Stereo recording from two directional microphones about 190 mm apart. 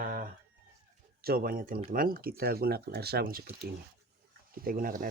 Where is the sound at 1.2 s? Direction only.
50° right (ahead or behind).